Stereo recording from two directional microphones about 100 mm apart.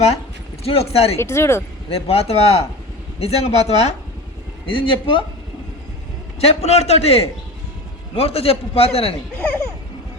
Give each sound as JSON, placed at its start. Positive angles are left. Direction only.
{"t": 0.6, "sound": "speech", "side_deg": 85}
{"t": 1.1, "sound": "speech", "side_deg": 25}
{"t": 1.9, "sound": "a man's voice", "side_deg": 80}
{"t": 4.6, "sound": "speech", "side_deg": 60}
{"t": 6.4, "sound": "a man's voice", "side_deg": 90}
{"t": 8.1, "sound": "a man's voice", "side_deg": 75}